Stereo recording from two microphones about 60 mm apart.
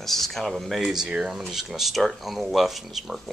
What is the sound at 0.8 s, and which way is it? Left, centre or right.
Speech, centre.